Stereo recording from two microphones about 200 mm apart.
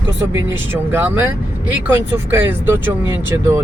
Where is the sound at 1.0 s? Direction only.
10° right (ahead or behind).